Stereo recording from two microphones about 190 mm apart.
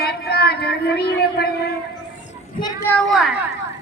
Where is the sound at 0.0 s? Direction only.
55° left (ahead or behind).